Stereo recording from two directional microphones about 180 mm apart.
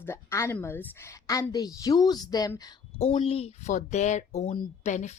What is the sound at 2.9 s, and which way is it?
Speech, 35° left (ahead or behind).